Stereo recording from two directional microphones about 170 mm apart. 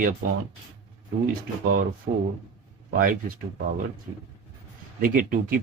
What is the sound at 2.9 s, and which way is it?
Speech, 55° right (ahead or behind).